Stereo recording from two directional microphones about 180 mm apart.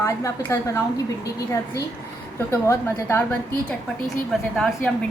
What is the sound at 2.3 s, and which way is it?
A woman's voice, 15° left (ahead or behind).